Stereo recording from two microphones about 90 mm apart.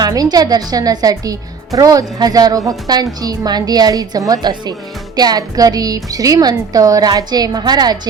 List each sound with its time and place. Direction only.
0.0 s speech: 45° right (ahead or behind)